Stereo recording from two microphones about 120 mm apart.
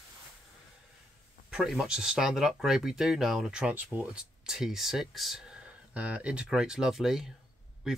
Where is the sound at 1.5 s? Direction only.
Centre (ahead or behind).